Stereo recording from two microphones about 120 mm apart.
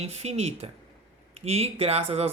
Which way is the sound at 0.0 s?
65° right (ahead or behind).